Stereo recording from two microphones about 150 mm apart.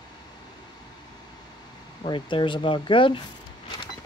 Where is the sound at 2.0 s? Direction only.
30° left (ahead or behind).